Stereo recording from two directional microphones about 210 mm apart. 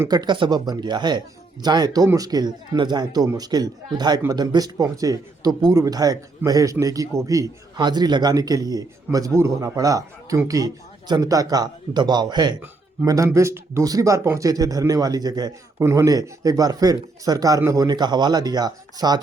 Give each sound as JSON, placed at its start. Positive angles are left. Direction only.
{"t": 0.0, "sound": "a man's voice", "side_deg": -20}